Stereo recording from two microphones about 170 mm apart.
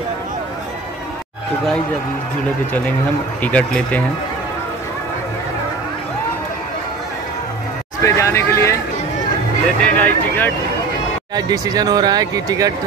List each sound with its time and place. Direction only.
3.4 s speech: 10° left (ahead or behind)
8.0 s speech: 15° left (ahead or behind)
11.3 s speech: 20° right (ahead or behind)